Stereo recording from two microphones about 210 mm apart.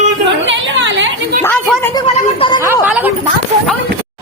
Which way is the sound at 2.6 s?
10° right (ahead or behind).